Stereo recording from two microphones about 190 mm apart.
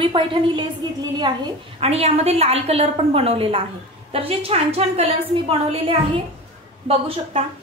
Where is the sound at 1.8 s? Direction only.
30° right (ahead or behind).